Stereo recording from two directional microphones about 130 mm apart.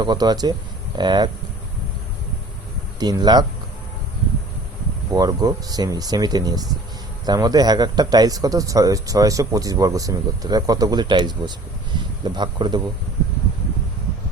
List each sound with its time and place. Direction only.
0.0 s speech: 30° right (ahead or behind)
3.0 s speech: 30° right (ahead or behind)
5.1 s speech: 30° right (ahead or behind)